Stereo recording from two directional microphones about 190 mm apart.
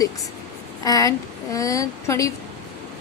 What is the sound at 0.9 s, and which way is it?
A woman's voice, 20° left (ahead or behind).